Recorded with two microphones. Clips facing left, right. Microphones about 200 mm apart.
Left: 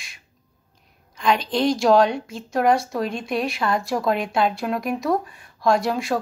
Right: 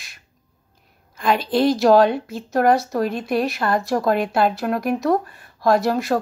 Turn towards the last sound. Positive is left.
turn(degrees=0)  # may be behind; listen again after turning